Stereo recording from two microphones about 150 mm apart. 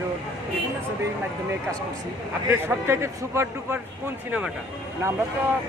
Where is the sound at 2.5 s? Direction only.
15° right (ahead or behind).